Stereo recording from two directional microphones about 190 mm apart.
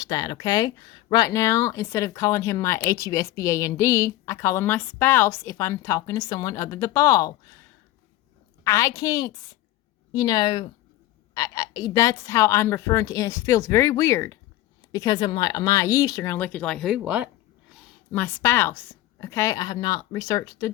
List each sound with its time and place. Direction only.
0.0 s speech: 20° left (ahead or behind)
8.6 s speech: 15° left (ahead or behind); by 17.2 s 5° right (ahead or behind)
18.1 s speech: 10° left (ahead or behind)